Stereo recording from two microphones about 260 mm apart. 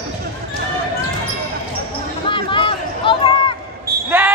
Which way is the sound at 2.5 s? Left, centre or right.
Centre.